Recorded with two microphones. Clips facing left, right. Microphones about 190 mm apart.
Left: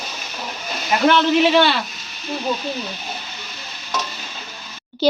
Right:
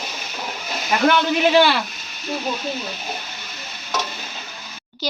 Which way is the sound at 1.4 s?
5° right (ahead or behind).